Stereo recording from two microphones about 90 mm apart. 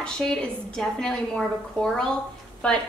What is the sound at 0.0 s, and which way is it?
A woman's voice, 5° left (ahead or behind).